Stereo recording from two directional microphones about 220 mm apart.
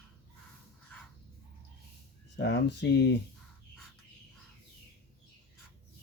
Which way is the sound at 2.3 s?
50° left (ahead or behind).